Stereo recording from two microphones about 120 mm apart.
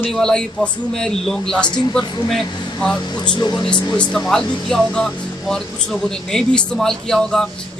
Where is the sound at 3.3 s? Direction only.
35° left (ahead or behind).